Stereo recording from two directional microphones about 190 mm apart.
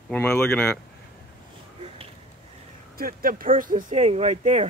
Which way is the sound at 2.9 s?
50° right (ahead or behind).